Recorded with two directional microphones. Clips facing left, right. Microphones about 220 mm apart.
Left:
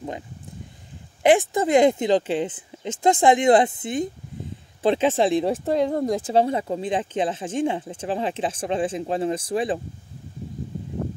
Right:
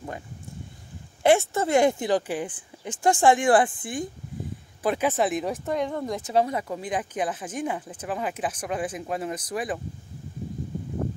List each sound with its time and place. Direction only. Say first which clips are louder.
1.2 s speech: left 2 dB; 15° left (ahead or behind)